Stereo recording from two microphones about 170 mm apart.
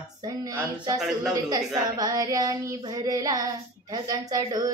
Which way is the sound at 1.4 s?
25° right (ahead or behind).